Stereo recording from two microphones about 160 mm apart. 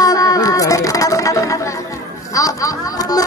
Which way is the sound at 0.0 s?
25° left (ahead or behind).